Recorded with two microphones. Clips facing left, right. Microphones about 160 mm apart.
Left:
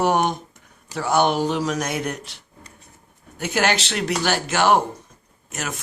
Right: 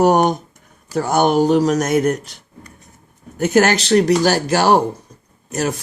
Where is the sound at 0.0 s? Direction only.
40° right (ahead or behind).